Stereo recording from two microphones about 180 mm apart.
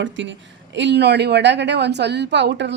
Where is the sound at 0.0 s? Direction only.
90° right.